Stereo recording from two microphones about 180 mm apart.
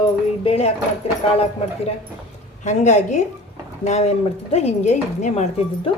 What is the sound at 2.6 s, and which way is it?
Speech, 40° left (ahead or behind).